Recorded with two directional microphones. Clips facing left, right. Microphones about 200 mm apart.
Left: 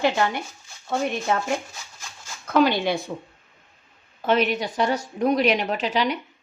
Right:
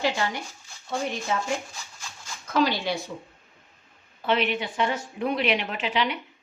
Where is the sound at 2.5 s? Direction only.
55° left (ahead or behind).